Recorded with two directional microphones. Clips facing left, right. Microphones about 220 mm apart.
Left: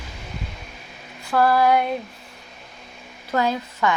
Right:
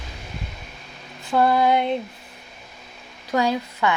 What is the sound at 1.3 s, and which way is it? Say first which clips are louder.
Female singing: even; 20° right (ahead or behind).